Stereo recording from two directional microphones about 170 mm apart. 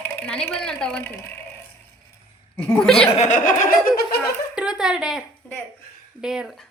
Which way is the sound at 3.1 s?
45° left (ahead or behind).